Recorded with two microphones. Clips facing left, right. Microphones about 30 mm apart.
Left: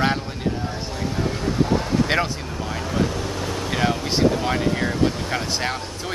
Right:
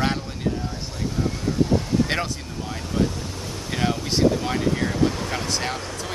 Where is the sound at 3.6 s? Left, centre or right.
Centre.